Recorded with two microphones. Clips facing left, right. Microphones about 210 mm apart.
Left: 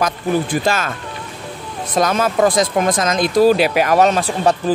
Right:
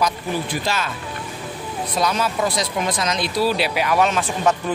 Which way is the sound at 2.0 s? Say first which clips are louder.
Left 6 dB; 50° left (ahead or behind).